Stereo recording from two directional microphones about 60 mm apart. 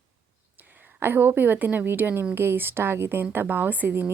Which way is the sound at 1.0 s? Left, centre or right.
Right.